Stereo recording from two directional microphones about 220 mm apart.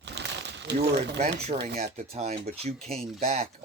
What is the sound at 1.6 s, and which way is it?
Speech, 30° right (ahead or behind).